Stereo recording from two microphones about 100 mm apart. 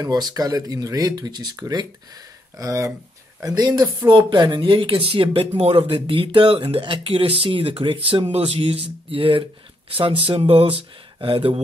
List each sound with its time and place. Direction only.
0.0 s speech: 40° right (ahead or behind)
2.6 s speech: 30° right (ahead or behind); by 11.6 s 65° right (ahead or behind)